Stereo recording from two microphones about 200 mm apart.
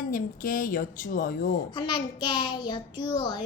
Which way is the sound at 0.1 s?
45° left (ahead or behind).